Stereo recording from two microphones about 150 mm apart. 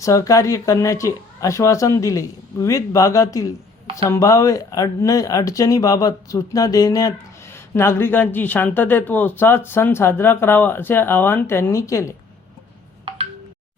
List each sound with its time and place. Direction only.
0.0 s speech: 20° left (ahead or behind)